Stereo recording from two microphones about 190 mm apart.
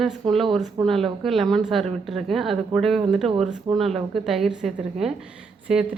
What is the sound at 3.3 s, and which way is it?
Speech, 30° right (ahead or behind).